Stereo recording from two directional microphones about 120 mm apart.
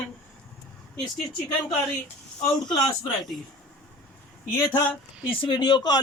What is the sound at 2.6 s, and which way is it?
Speech, 35° left (ahead or behind).